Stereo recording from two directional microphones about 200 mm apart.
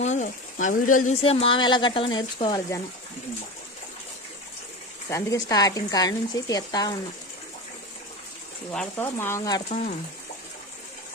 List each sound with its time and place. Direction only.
0.0 s speech: 35° left (ahead or behind)
1.2 s speech: 30° left (ahead or behind)
5.1 s speech: 15° left (ahead or behind)
8.7 s speech: 10° left (ahead or behind)